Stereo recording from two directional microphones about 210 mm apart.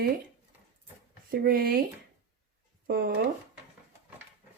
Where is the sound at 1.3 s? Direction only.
45° right (ahead or behind).